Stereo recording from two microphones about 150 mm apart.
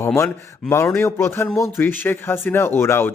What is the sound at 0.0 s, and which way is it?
A man's voice, 20° left (ahead or behind).